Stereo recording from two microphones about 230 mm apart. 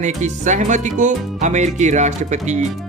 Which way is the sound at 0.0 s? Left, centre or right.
Right.